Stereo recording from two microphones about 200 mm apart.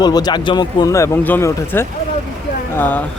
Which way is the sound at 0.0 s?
20° left (ahead or behind).